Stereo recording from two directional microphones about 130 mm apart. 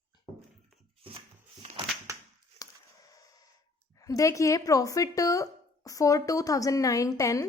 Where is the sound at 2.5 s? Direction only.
25° left (ahead or behind).